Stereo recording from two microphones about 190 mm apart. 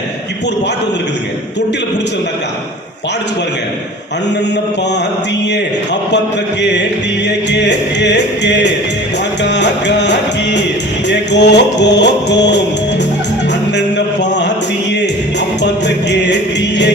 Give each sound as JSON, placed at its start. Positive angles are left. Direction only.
{"t": 7.3, "sound": "music", "side_deg": 65}
{"t": 13.7, "sound": "a sound", "side_deg": 65}
{"t": 15.6, "sound": "music", "side_deg": 65}